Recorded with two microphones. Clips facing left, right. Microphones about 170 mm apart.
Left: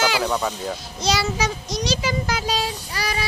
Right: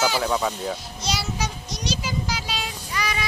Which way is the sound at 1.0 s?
90° left.